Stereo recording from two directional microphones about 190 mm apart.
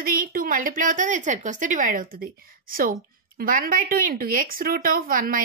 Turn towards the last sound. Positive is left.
turn(degrees=-45)  # may be behind; listen again after turning